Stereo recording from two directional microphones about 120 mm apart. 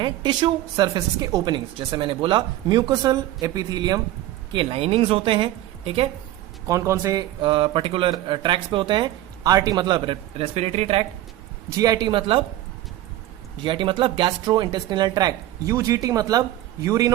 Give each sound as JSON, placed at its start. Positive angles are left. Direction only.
{"t": 0.0, "sound": "a woman's voice", "side_deg": -40}
{"t": 4.5, "sound": "speech", "side_deg": -50}
{"t": 6.7, "sound": "speech", "side_deg": -25}
{"t": 7.4, "sound": "speech", "side_deg": -45}
{"t": 11.8, "sound": "a woman's voice", "side_deg": -35}
{"t": 13.7, "sound": "a woman's voice", "side_deg": -45}